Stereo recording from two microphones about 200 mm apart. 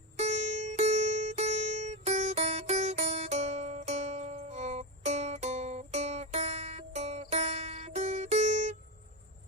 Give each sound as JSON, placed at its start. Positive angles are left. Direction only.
{"t": 0.2, "sound": "music", "side_deg": -35}